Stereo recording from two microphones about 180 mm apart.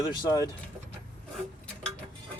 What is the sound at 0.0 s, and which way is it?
Speech, 25° left (ahead or behind).